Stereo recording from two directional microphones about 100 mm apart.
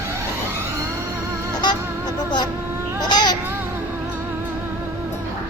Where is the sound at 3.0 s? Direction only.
45° left (ahead or behind).